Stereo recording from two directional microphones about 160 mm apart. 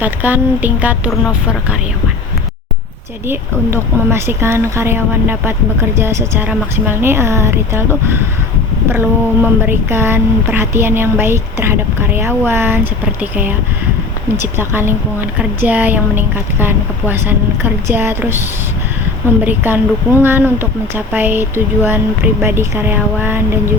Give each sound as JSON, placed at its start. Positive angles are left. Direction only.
{"t": 0.0, "sound": "speech", "side_deg": -10}
{"t": 3.2, "sound": "speech", "side_deg": -15}
{"t": 14.3, "sound": "speech", "side_deg": -15}
{"t": 19.5, "sound": "speech", "side_deg": -15}